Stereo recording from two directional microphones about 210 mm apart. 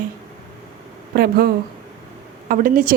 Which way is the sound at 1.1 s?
45° right (ahead or behind).